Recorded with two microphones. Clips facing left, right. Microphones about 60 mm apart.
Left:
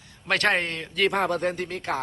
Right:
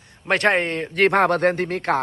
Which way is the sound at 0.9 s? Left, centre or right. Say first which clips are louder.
Right 6 dB; right.